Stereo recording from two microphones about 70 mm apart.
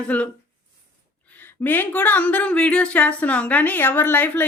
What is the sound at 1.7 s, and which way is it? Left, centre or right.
A woman's voice, left.